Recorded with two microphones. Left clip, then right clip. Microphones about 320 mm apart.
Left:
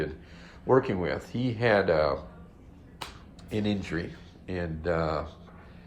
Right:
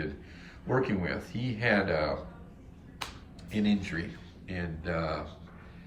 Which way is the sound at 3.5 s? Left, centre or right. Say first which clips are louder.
Left 1 dB; centre.